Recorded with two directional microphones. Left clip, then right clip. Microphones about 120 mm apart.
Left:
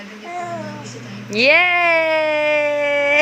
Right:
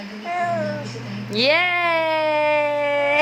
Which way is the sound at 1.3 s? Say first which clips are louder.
Left 5 dB; 40° left (ahead or behind).